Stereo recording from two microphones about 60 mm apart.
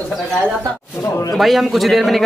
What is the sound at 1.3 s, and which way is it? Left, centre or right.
Speech, centre.